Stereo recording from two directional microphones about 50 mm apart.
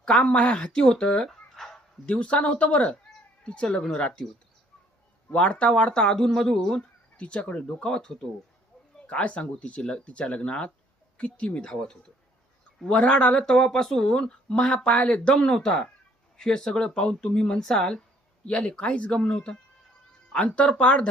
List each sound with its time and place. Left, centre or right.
0.0 s speech: centre
1.5 s dog: centre
2.0 s speech: left
5.3 s speech: left
7.2 s speech: left
9.0 s speech: left
11.7 s speech: centre